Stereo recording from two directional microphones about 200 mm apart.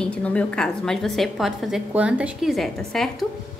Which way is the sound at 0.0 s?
5° left (ahead or behind).